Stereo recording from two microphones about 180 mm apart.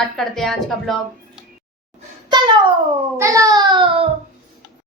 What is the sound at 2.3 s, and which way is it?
A child's voice, 25° right (ahead or behind).